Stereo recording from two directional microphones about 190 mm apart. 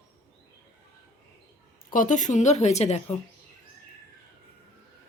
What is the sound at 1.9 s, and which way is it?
Speech, 40° left (ahead or behind).